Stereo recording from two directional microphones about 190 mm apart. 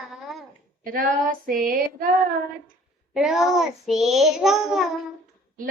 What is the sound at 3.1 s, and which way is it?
Child singing, centre (ahead or behind).